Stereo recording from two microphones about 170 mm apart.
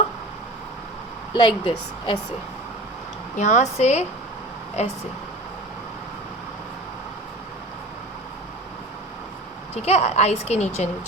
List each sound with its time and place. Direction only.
1.3 s a woman's voice: 30° left (ahead or behind)
3.3 s a woman's voice: 45° left (ahead or behind)
9.7 s a woman's voice: 40° left (ahead or behind)